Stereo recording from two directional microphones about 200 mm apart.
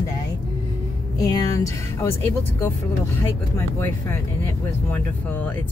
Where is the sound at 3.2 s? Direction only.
10° left (ahead or behind).